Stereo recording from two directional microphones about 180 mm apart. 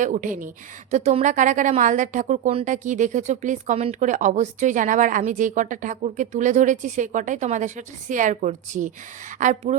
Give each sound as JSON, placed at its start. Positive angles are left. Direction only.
{"t": 0.0, "sound": "speech", "side_deg": -45}